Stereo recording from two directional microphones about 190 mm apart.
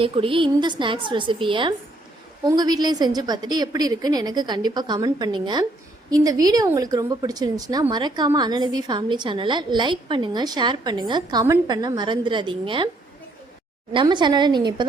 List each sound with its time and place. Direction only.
0.0 s a woman's voice: 30° right (ahead or behind)
13.9 s a woman's voice: 25° right (ahead or behind)